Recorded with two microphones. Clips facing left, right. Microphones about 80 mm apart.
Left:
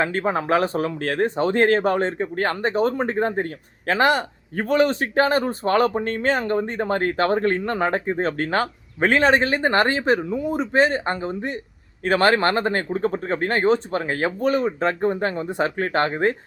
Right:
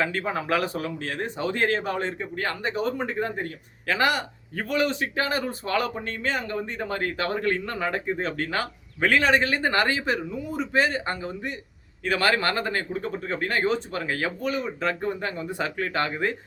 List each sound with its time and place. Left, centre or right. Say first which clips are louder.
0.0 s speech: left 5 dB; left